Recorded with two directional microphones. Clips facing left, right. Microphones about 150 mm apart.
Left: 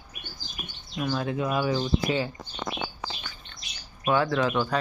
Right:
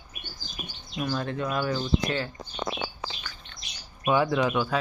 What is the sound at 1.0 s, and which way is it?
Speech, 5° left (ahead or behind).